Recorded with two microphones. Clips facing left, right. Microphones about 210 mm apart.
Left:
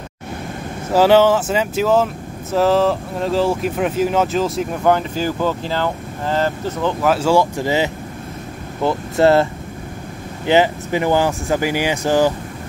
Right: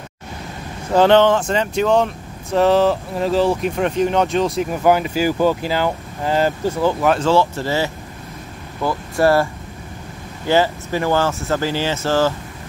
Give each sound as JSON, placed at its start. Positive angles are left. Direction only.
{"t": 0.9, "sound": "speech", "side_deg": 5}